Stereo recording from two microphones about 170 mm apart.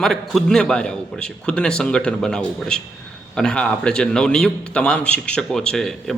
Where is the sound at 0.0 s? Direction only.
Centre (ahead or behind).